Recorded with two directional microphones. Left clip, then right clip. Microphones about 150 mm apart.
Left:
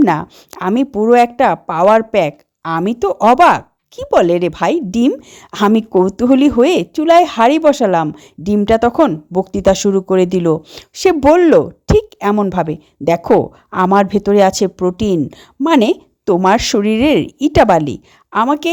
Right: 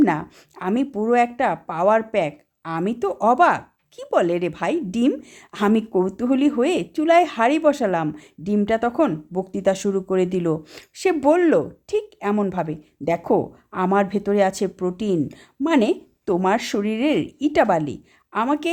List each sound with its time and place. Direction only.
0.0 s speech: 45° left (ahead or behind)